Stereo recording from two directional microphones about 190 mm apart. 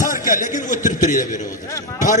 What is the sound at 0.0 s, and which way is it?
A man's voice, 45° left (ahead or behind).